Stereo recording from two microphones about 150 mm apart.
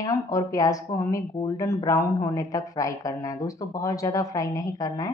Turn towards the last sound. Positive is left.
turn(degrees=25)  # may be behind; listen again after turning